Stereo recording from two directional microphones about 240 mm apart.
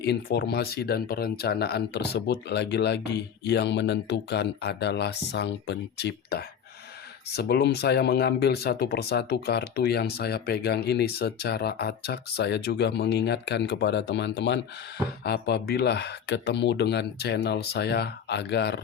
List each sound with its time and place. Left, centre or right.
0.0 s speech: left